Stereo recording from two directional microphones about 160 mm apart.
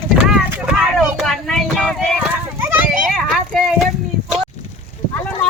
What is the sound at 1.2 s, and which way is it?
Child singing, centre (ahead or behind).